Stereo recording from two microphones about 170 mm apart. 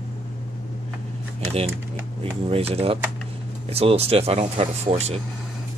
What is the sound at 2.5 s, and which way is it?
Speech, 35° right (ahead or behind).